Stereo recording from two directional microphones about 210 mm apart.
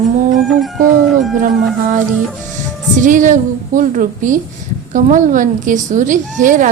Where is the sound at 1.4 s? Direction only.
40° right (ahead or behind).